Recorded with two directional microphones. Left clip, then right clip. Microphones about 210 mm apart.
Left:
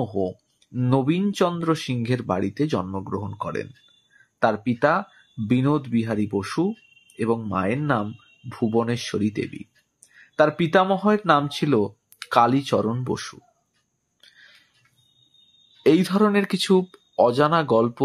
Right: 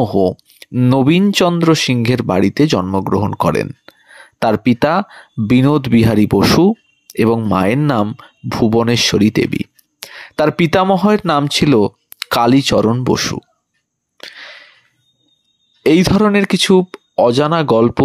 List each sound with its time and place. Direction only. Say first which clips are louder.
0.0 s speech: right 12 dB; 40° right (ahead or behind)
14.2 s a sound: right 18 dB; 40° right (ahead or behind)
15.8 s speech: right 7 dB; 35° right (ahead or behind)